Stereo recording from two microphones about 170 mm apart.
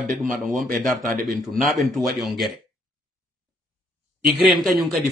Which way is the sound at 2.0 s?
Centre (ahead or behind).